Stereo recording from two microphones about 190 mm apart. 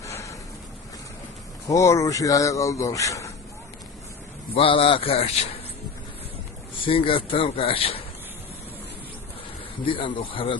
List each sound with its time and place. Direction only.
0.0 s a sound: 15° left (ahead or behind)
1.7 s speech: 15° left (ahead or behind)
4.5 s speech: 30° left (ahead or behind)
6.8 s speech: 30° left (ahead or behind)
9.8 s speech: 25° left (ahead or behind)